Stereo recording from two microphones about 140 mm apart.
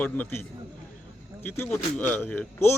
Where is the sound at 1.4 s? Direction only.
15° left (ahead or behind).